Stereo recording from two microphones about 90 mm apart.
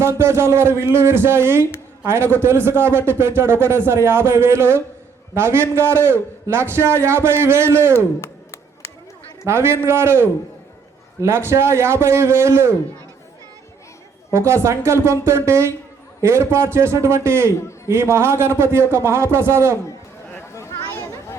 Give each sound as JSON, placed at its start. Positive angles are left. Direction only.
{"t": 0.0, "sound": "a man's voice", "side_deg": -30}
{"t": 9.5, "sound": "a man's voice", "side_deg": -30}
{"t": 14.3, "sound": "a man's voice", "side_deg": -30}